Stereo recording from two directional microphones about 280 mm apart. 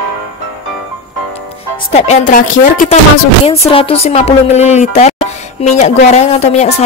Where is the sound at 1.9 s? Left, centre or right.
Left.